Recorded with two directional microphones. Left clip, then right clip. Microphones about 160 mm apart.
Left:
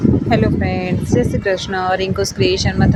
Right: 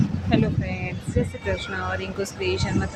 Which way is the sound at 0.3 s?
45° left (ahead or behind).